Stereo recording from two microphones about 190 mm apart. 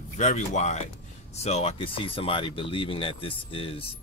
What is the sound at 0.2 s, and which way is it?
Speech, 40° left (ahead or behind).